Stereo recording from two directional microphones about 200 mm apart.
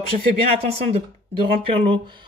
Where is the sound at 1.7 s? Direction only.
25° right (ahead or behind).